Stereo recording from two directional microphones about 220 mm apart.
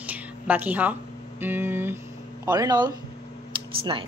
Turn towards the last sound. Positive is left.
turn(degrees=-20)  # may be behind; listen again after turning